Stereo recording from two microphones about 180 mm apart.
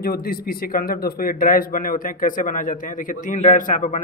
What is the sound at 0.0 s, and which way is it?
A man's voice, 55° left (ahead or behind).